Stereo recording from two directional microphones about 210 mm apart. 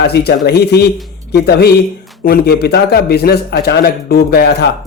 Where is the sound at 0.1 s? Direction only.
50° left (ahead or behind).